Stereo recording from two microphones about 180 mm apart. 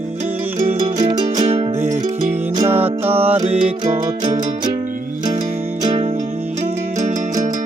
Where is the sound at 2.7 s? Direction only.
10° right (ahead or behind).